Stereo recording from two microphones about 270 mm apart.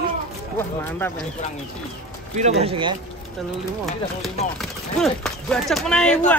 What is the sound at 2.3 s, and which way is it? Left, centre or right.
Speech, right.